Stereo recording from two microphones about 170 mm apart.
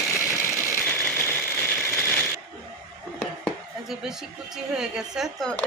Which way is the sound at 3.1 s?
Centre (ahead or behind).